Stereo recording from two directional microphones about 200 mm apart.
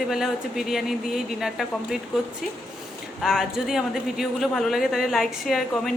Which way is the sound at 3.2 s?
Centre (ahead or behind).